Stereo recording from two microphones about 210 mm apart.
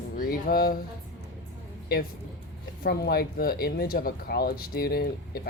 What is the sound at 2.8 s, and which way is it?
Speech, 45° left (ahead or behind).